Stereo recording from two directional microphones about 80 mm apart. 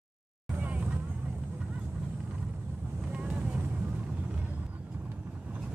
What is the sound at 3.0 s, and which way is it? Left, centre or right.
Vehicle, centre.